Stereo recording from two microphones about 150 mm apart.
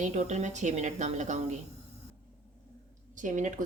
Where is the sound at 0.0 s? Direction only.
50° right (ahead or behind).